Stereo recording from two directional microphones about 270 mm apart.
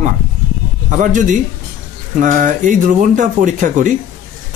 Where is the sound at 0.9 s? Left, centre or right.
Right.